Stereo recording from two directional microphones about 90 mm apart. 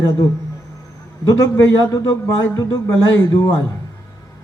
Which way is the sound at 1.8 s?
50° left (ahead or behind).